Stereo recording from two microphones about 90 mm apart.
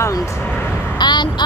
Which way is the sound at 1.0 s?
55° left (ahead or behind).